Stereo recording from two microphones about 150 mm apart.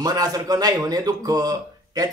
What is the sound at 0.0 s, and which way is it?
Speech, 25° right (ahead or behind).